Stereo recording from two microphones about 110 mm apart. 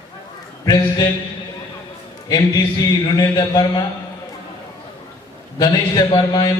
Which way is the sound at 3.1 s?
40° left (ahead or behind).